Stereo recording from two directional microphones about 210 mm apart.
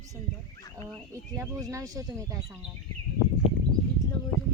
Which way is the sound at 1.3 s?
15° right (ahead or behind).